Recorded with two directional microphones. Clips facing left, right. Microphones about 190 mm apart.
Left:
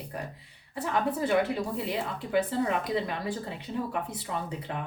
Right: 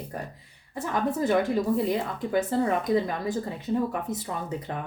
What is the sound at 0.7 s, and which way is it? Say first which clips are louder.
A woman's voice: right 2 dB; 45° right (ahead or behind).